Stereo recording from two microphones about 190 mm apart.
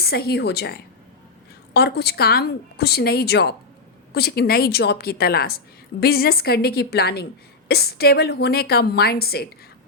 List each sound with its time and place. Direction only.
0.0 s a woman's voice: 55° left (ahead or behind)